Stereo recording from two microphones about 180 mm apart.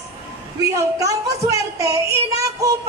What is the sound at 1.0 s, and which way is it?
Speech, 20° right (ahead or behind).